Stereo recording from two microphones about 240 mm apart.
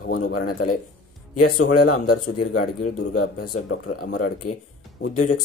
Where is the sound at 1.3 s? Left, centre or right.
Left.